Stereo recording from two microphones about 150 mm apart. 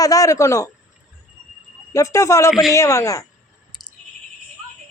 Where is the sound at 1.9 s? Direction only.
20° left (ahead or behind).